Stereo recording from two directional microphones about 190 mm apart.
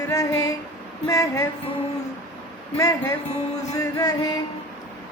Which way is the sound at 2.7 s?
15° left (ahead or behind).